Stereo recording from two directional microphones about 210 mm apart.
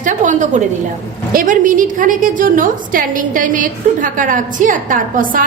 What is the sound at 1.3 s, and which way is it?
A woman's voice, 40° right (ahead or behind).